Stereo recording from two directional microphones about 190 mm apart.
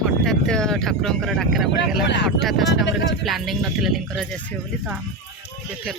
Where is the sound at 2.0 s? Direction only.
65° left (ahead or behind).